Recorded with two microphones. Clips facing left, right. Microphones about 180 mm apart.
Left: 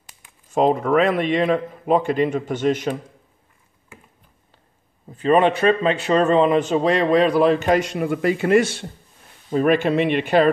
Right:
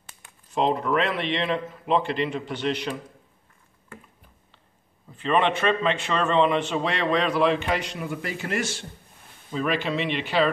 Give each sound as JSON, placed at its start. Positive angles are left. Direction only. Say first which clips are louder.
{"t": 0.5, "sound": "a man's voice", "louder": "left 6 dB", "side_deg": 45}
{"t": 5.1, "sound": "a man's voice", "louder": "left 6 dB", "side_deg": 40}